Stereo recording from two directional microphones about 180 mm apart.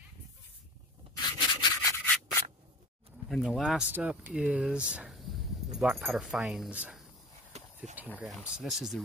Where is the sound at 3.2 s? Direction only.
Centre (ahead or behind).